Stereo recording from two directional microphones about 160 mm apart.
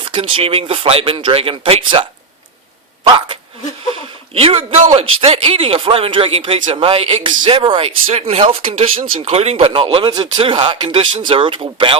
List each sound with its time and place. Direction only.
0.0 s a man's voice: 30° right (ahead or behind)
3.9 s a man's voice: 40° right (ahead or behind)